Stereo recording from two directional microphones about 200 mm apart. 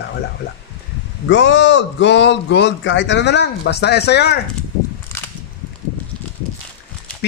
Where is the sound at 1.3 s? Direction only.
70° left (ahead or behind).